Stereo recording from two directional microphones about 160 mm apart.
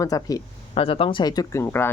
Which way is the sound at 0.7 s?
35° left (ahead or behind).